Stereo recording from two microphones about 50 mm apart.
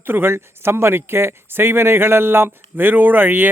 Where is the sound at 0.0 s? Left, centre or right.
Right.